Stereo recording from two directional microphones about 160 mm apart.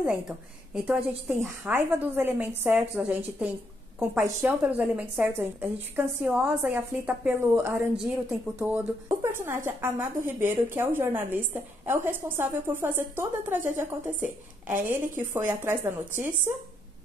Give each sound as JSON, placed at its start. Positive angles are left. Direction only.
{"t": 0.7, "sound": "a woman's voice", "side_deg": -10}